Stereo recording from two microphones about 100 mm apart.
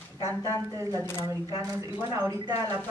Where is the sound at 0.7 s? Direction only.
30° right (ahead or behind).